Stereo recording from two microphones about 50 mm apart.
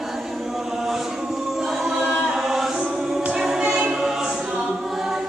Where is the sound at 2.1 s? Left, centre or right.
Centre.